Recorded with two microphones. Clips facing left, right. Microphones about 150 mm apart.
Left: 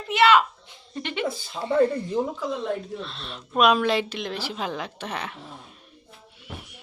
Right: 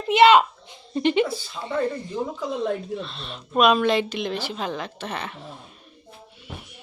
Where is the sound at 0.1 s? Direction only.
25° right (ahead or behind).